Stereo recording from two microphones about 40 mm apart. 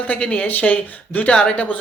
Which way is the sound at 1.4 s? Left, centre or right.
Left.